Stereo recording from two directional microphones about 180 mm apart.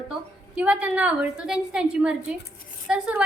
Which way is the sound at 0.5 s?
10° right (ahead or behind).